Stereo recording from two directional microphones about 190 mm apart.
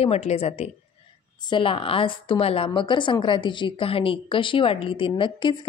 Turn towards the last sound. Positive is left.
turn(degrees=25)  # may be behind; listen again after turning